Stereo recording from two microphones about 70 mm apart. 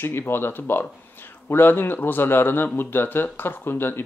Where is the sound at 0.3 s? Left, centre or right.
Left.